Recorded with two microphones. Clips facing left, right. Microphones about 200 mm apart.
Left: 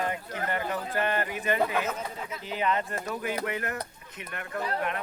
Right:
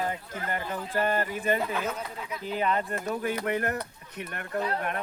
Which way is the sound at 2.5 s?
45° right (ahead or behind).